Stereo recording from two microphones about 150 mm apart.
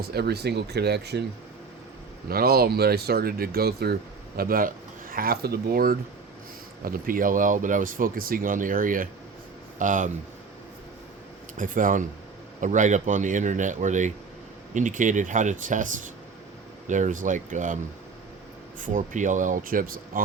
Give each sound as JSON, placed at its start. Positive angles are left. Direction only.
{"t": 0.1, "sound": "speech", "side_deg": -90}
{"t": 2.3, "sound": "speech", "side_deg": -90}
{"t": 4.4, "sound": "speech", "side_deg": -75}
{"t": 6.8, "sound": "a man's voice", "side_deg": -75}
{"t": 11.5, "sound": "a man's voice", "side_deg": -65}
{"t": 18.8, "sound": "a man's voice", "side_deg": -60}